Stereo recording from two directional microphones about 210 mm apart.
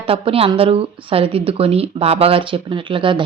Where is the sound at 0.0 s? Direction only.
25° right (ahead or behind).